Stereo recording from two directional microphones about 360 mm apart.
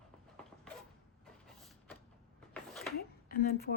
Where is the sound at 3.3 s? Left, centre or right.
Left.